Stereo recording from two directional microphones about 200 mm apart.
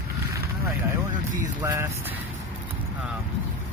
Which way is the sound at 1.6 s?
10° right (ahead or behind).